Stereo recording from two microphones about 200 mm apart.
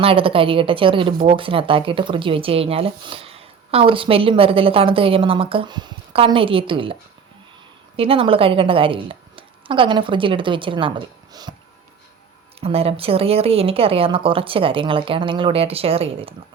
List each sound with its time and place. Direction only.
0.0 s speech: 25° right (ahead or behind)
7.9 s speech: 30° right (ahead or behind)
12.5 s speech: 30° right (ahead or behind)